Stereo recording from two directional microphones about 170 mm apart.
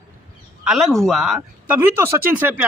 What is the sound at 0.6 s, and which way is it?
Speech, centre (ahead or behind).